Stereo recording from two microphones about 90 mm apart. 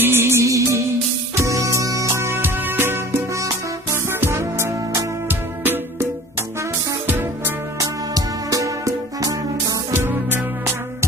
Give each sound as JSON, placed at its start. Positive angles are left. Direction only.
{"t": 0.0, "sound": "music", "side_deg": -25}
{"t": 7.1, "sound": "music", "side_deg": -20}
{"t": 7.8, "sound": "music", "side_deg": -40}
{"t": 9.9, "sound": "music", "side_deg": -25}